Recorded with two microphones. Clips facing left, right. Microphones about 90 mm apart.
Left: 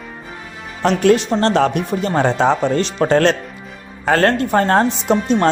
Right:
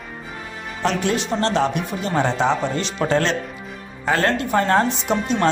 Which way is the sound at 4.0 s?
55° left (ahead or behind).